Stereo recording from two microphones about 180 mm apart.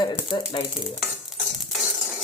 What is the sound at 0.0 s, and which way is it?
Speech, 25° left (ahead or behind).